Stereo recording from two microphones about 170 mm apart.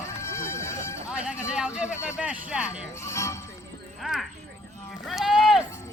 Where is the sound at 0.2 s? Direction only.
15° left (ahead or behind).